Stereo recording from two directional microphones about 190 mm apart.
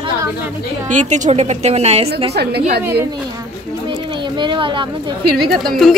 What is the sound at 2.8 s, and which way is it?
Speech, 10° right (ahead or behind).